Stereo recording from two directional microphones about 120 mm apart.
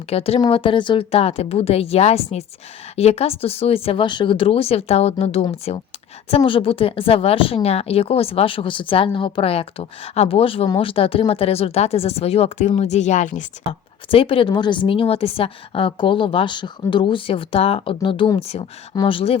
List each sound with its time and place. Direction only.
0.1 s a woman's voice: 55° left (ahead or behind); by 13.4 s 90° left
14.1 s a woman's voice: 50° left (ahead or behind)